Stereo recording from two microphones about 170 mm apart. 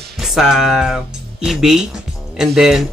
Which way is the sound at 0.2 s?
Centre (ahead or behind).